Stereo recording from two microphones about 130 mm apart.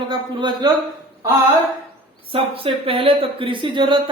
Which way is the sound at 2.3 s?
45° right (ahead or behind).